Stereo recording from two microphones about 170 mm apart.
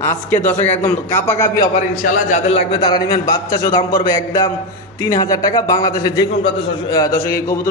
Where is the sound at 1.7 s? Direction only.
50° left (ahead or behind); by 7.2 s 20° left (ahead or behind).